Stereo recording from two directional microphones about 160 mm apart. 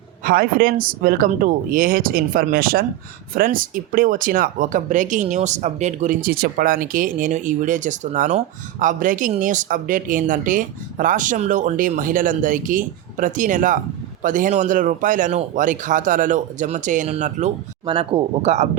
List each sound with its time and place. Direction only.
0.3 s speech: 65° right (ahead or behind); by 17.5 s 45° right (ahead or behind)
17.8 s speech: 35° right (ahead or behind)